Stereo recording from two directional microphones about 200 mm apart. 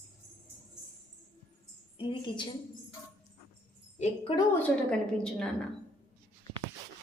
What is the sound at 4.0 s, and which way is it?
Speech, 25° left (ahead or behind).